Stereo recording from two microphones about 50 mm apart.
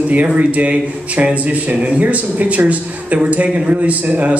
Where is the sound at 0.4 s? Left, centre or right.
Right.